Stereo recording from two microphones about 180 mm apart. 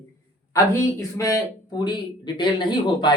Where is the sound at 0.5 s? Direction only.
15° left (ahead or behind).